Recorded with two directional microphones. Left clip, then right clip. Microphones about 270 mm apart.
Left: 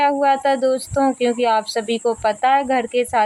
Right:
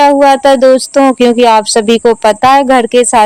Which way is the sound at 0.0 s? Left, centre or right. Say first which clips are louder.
Right 11 dB; right.